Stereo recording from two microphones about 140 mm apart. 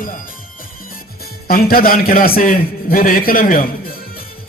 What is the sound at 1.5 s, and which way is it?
A man's voice, 90° left.